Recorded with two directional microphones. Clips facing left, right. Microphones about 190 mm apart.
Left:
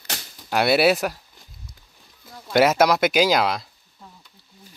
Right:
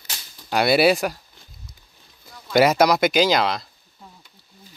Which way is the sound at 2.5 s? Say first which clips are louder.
Right 1 dB; 5° left (ahead or behind).